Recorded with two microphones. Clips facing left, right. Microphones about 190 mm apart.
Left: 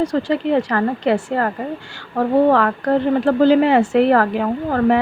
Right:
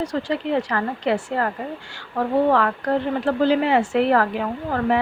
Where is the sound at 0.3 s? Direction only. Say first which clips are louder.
Left 5 dB; 50° left (ahead or behind).